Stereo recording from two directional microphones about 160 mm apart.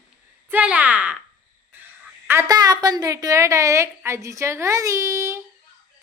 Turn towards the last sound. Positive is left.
turn(degrees=-20)  # may be behind; listen again after turning